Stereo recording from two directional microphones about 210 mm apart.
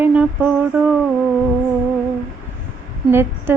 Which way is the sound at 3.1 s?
10° right (ahead or behind).